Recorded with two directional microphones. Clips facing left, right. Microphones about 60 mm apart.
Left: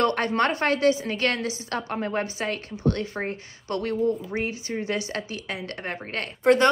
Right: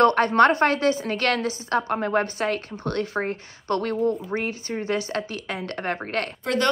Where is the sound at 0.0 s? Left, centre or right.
Right.